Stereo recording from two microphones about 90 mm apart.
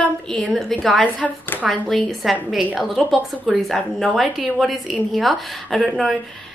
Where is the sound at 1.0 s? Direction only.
15° left (ahead or behind).